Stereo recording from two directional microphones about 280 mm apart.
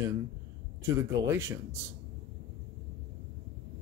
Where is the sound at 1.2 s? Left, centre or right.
Centre.